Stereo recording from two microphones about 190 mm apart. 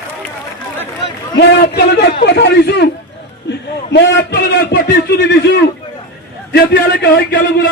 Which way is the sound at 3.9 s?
65° left (ahead or behind).